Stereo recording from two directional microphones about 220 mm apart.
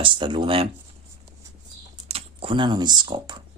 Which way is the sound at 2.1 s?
25° right (ahead or behind).